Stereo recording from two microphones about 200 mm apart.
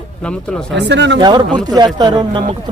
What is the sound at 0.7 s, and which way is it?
Speech, 60° right (ahead or behind).